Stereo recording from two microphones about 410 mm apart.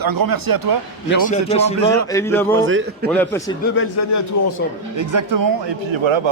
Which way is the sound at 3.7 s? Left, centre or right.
Left.